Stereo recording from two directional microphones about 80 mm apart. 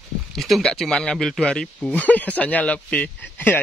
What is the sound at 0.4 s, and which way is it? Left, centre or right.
Speech, centre.